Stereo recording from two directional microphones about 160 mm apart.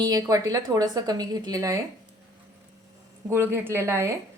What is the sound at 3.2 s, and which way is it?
Speech, 15° right (ahead or behind).